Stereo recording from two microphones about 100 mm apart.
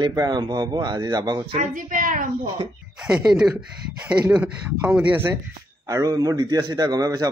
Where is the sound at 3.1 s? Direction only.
10° right (ahead or behind).